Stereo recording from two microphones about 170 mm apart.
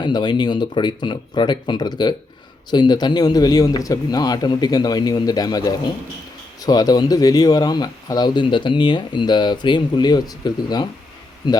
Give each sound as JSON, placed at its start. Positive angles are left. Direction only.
{"t": 0.0, "sound": "speech", "side_deg": 25}